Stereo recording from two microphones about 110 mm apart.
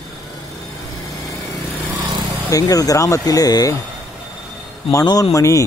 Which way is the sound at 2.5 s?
30° left (ahead or behind).